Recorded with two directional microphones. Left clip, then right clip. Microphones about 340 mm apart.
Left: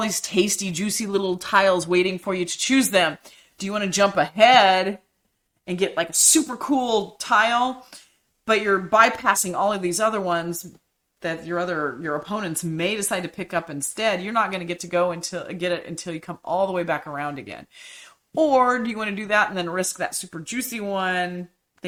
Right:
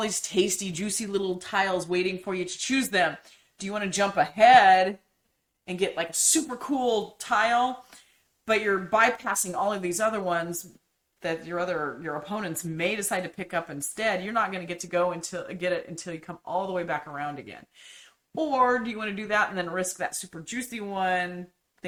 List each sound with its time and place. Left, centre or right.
0.0 s speech: left
18.3 s speech: left